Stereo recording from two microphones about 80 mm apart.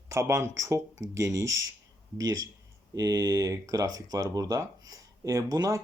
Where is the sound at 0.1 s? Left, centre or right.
Right.